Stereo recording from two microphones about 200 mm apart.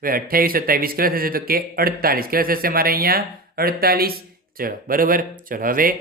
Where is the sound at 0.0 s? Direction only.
45° right (ahead or behind).